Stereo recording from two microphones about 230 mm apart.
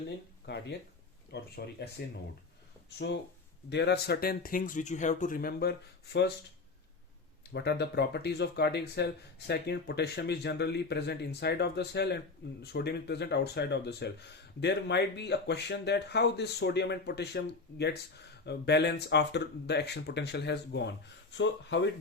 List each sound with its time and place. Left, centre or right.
0.4 s speech: left
3.0 s speech: left
7.5 s speech: left